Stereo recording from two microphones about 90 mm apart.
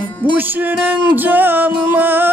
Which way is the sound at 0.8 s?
20° right (ahead or behind).